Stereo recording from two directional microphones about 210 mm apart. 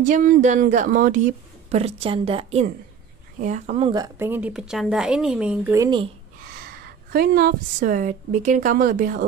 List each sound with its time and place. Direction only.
0.0 s a woman's voice: 40° right (ahead or behind); by 6.0 s 20° right (ahead or behind)
6.5 s a woman's voice: 50° right (ahead or behind)